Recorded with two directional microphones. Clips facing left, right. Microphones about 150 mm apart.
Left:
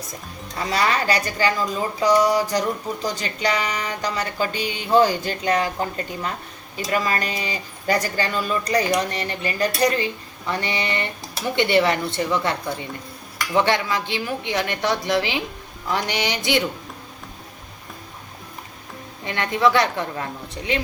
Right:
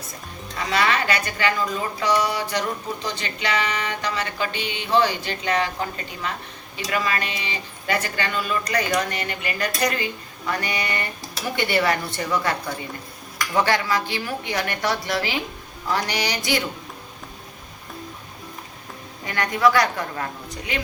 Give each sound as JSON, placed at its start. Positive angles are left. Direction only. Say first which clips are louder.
{"t": 0.7, "sound": "music", "louder": "left 1 dB", "side_deg": 35}
{"t": 6.7, "sound": "music", "louder": "left 2 dB", "side_deg": 40}
{"t": 10.5, "sound": "speech", "louder": "left 2 dB", "side_deg": 25}
{"t": 19.2, "sound": "speech", "louder": "even", "side_deg": 25}